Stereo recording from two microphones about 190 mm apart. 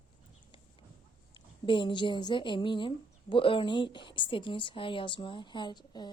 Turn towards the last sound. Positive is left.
turn(degrees=25)  # may be behind; listen again after turning